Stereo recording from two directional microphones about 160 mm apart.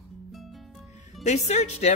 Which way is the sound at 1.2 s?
45° left (ahead or behind).